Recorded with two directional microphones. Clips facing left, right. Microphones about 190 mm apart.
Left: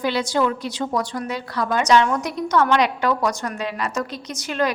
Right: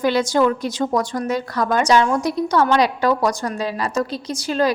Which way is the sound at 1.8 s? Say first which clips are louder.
Right 1 dB; 35° right (ahead or behind).